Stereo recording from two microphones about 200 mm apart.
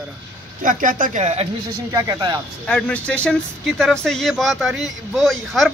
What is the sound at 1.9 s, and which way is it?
Speech, 15° right (ahead or behind).